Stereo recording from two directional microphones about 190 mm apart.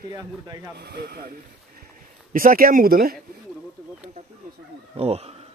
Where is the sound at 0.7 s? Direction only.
60° right (ahead or behind).